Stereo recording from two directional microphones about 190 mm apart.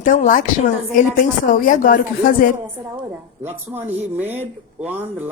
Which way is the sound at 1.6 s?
45° left (ahead or behind).